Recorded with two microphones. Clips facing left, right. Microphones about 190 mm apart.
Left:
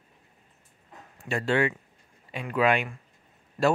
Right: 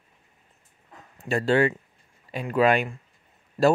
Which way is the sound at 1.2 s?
35° right (ahead or behind).